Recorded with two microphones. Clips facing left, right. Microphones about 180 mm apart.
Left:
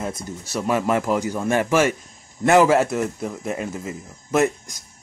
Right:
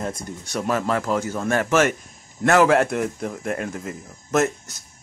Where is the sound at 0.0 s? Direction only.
5° left (ahead or behind).